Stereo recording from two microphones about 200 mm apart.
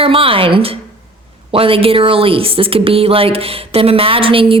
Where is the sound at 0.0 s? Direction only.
25° right (ahead or behind).